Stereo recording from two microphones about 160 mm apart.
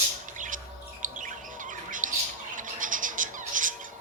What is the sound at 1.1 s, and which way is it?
Bird, 55° right (ahead or behind).